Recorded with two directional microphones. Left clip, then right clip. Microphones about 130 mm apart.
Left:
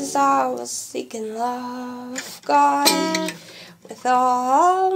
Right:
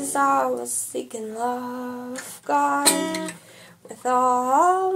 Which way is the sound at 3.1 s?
40° left (ahead or behind).